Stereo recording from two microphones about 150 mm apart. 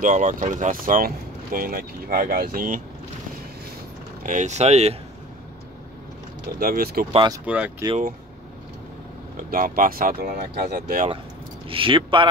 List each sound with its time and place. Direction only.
0.0 s speech: 55° right (ahead or behind)
4.2 s speech: 55° right (ahead or behind)
6.6 s speech: 80° right
7.4 s speech: 10° right (ahead or behind)
9.4 s speech: 70° right (ahead or behind); by 11.1 s 90° right
11.7 s speech: 35° right (ahead or behind)